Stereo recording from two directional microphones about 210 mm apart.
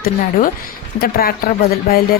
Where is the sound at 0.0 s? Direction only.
45° left (ahead or behind).